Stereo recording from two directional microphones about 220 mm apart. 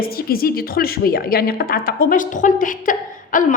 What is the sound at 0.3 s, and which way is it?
A woman's voice, 40° left (ahead or behind).